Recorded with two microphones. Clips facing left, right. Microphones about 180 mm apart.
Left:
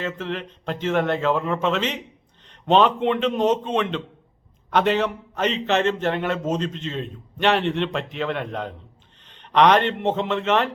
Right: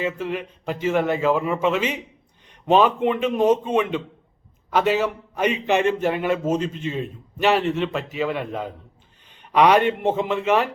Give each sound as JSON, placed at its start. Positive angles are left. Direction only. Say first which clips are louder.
{"t": 0.0, "sound": "a man's voice", "louder": "right 3 dB", "side_deg": -10}